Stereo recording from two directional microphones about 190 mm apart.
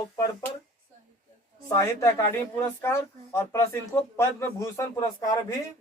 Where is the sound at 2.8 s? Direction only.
15° left (ahead or behind).